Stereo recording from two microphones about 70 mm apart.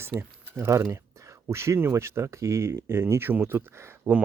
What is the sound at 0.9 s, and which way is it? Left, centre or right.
Speech, right.